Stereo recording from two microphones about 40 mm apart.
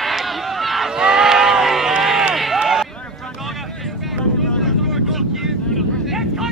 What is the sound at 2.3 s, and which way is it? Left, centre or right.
Run, centre.